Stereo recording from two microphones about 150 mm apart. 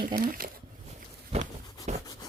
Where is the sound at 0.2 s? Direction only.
75° right (ahead or behind).